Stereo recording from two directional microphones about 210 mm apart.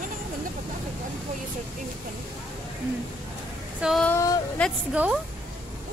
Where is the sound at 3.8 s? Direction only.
Centre (ahead or behind).